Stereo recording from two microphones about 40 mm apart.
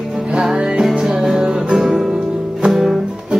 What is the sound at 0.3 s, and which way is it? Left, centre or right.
Music, right.